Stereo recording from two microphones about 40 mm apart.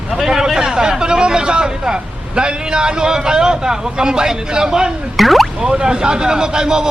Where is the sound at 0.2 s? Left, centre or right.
Centre.